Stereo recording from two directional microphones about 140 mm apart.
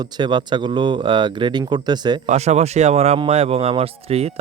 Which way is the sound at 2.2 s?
55° right (ahead or behind).